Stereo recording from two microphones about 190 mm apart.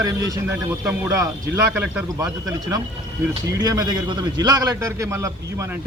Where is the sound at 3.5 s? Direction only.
20° right (ahead or behind).